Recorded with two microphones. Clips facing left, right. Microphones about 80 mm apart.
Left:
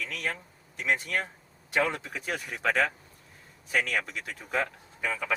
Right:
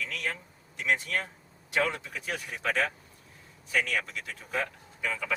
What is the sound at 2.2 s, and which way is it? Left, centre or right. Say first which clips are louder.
Speech: left 3 dB; left.